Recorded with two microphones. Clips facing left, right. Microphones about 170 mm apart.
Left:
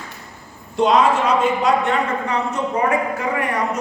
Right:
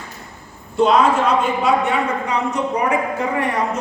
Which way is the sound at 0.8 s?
Centre (ahead or behind).